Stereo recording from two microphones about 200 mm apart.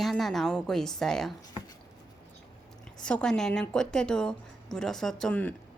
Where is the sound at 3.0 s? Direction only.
5° left (ahead or behind).